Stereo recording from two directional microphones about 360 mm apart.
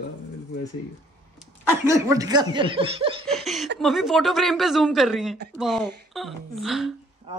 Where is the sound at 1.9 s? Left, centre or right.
Centre.